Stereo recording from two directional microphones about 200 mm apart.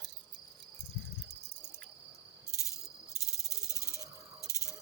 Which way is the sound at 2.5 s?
15° left (ahead or behind).